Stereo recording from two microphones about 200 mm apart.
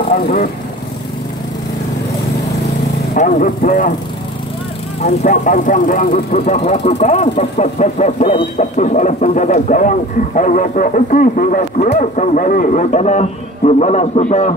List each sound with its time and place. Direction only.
0.1 s speech: 45° left (ahead or behind)
3.2 s speech: 40° left (ahead or behind)
5.0 s speech: 40° left (ahead or behind)